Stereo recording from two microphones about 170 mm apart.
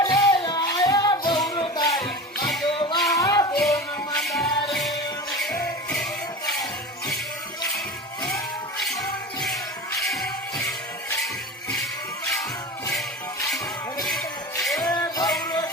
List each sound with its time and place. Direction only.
0.0 s music: 20° left (ahead or behind)
3.1 s a sound: 20° left (ahead or behind)
4.1 s music: 5° left (ahead or behind)
4.4 s music: 30° left (ahead or behind)
4.7 s music: centre (ahead or behind)
8.8 s music: centre (ahead or behind)
14.8 s music: 20° left (ahead or behind)